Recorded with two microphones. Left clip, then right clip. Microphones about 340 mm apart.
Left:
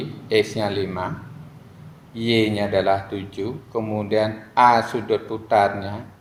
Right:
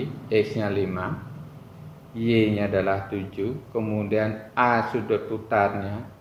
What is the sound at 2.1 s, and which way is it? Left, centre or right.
A man's voice, left.